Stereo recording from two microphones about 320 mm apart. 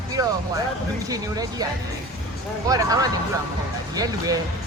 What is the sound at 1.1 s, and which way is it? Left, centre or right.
Speech, centre.